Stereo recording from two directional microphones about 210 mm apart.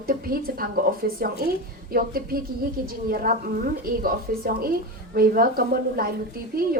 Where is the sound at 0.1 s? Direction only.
45° right (ahead or behind).